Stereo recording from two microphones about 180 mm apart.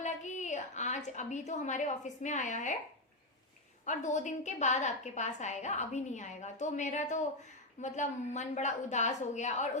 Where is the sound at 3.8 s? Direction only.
45° left (ahead or behind).